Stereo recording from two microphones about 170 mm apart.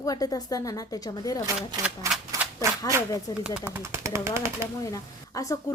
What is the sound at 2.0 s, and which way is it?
Speech, 15° right (ahead or behind).